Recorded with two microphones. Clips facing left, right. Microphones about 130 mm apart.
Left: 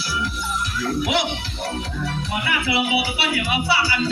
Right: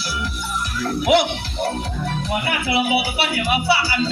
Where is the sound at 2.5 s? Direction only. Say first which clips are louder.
Right 1 dB; 50° right (ahead or behind).